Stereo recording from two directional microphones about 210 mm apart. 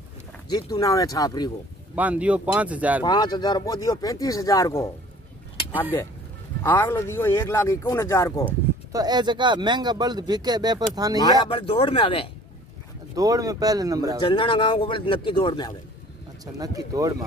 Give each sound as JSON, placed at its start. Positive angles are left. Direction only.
{"t": 0.5, "sound": "speech", "side_deg": 20}
{"t": 2.0, "sound": "speech", "side_deg": -5}
{"t": 3.0, "sound": "speech", "side_deg": 20}
{"t": 6.6, "sound": "speech", "side_deg": 10}
{"t": 8.5, "sound": "speech", "side_deg": -20}
{"t": 11.4, "sound": "speech", "side_deg": 25}
{"t": 13.1, "sound": "speech", "side_deg": -15}
{"t": 14.2, "sound": "speech", "side_deg": 25}
{"t": 16.5, "sound": "speech", "side_deg": -15}